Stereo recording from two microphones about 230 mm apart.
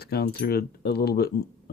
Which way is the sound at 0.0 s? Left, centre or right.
Left.